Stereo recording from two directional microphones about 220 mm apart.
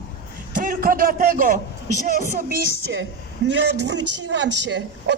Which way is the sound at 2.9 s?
55° right (ahead or behind).